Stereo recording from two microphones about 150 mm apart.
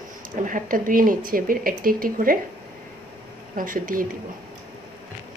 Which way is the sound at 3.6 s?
65° right (ahead or behind).